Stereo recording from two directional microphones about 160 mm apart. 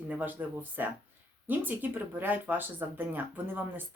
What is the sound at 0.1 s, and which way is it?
Speech, 10° right (ahead or behind).